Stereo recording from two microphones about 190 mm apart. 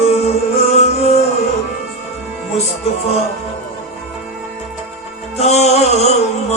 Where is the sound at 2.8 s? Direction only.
35° left (ahead or behind).